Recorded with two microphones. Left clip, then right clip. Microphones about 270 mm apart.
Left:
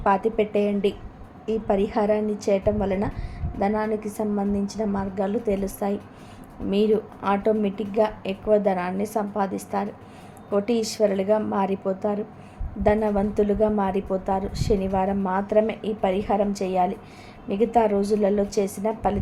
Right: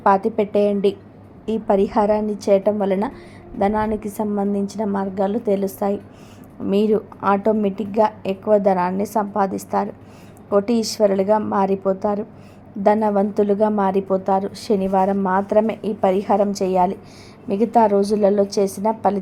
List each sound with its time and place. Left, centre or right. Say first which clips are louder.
0.0 s a woman's voice: right 4 dB; centre